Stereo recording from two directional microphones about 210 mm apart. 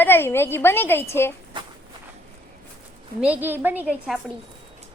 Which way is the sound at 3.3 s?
10° right (ahead or behind).